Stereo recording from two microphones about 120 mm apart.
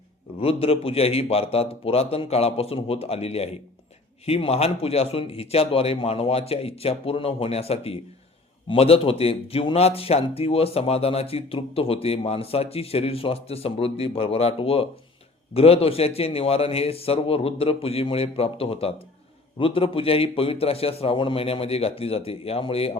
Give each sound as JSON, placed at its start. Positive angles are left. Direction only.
{"t": 0.3, "sound": "a man's voice", "side_deg": 55}